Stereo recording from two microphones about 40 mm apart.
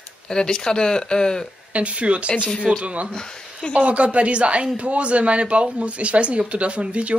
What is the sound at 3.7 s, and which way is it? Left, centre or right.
Speech, right.